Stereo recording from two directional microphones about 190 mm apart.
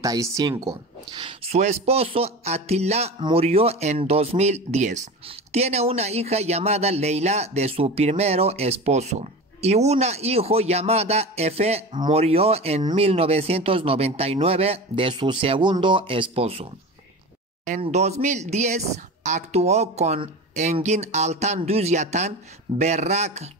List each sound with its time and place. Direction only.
0.0 s speech: 20° right (ahead or behind)
17.6 s speech: 40° right (ahead or behind)